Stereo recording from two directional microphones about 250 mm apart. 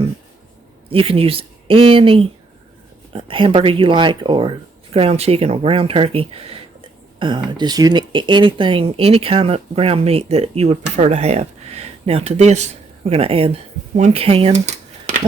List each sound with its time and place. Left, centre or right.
0.9 s speech: right